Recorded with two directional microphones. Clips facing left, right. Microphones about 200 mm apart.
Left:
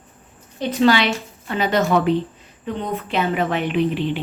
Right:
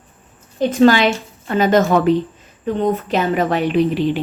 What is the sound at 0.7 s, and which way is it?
A woman's voice, 45° right (ahead or behind).